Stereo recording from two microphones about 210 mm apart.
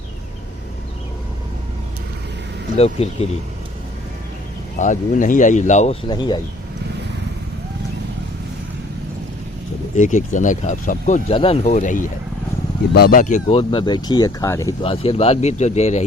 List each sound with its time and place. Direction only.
2.7 s speech: 30° left (ahead or behind)
4.8 s speech: 35° left (ahead or behind); by 6.4 s 20° left (ahead or behind)
9.9 s speech: 35° left (ahead or behind); by 14.8 s 15° left (ahead or behind)
14.8 s speech: 25° left (ahead or behind)